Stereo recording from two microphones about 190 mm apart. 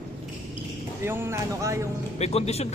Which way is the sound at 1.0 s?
10° right (ahead or behind).